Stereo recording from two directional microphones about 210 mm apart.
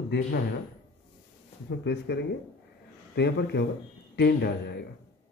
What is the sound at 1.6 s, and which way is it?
A man's voice, 55° left (ahead or behind).